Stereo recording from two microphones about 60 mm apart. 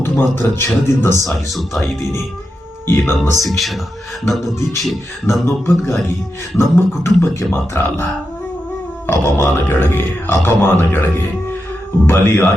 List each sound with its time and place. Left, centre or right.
0.0 s speech: left
1.3 s speech: centre
2.8 s speech: left
3.4 s speech: centre
5.2 s speech: left
9.0 s speech: left